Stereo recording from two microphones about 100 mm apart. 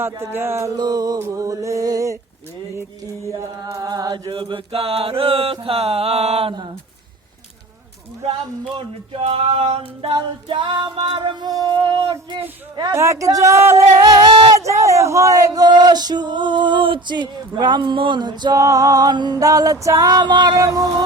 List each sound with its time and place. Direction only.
0.0 s a sound: 25° right (ahead or behind)
0.8 s music: 40° right (ahead or behind)
3.3 s music: 35° right (ahead or behind)
4.3 s mantra: 55° right (ahead or behind); by 6.5 s 90° right
8.8 s mantra: 70° right (ahead or behind)
10.5 s speech: 55° right (ahead or behind); by 11.7 s 40° right (ahead or behind)
11.7 s speech: 50° right (ahead or behind)
12.9 s music: 30° right (ahead or behind)
14.0 s speech: 45° right (ahead or behind)
14.6 s speech: 30° right (ahead or behind); by 18.5 s 50° right (ahead or behind)
18.5 s music: 35° right (ahead or behind)
20.6 s music: 35° right (ahead or behind)